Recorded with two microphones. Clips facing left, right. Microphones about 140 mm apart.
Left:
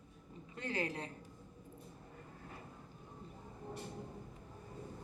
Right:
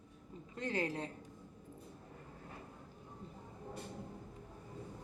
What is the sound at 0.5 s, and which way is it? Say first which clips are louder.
Speech: right 2 dB; 30° right (ahead or behind).